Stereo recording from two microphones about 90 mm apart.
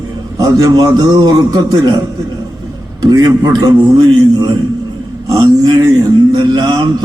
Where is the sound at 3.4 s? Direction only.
45° right (ahead or behind).